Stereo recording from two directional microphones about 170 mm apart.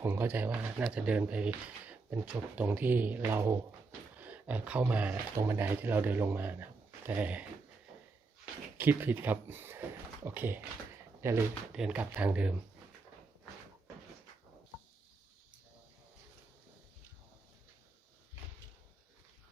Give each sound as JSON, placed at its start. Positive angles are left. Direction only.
{"t": 0.0, "sound": "speech", "side_deg": -10}
{"t": 8.8, "sound": "speech", "side_deg": -10}